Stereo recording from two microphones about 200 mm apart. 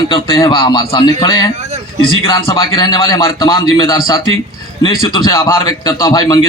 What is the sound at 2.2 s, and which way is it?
A man's voice, 15° left (ahead or behind).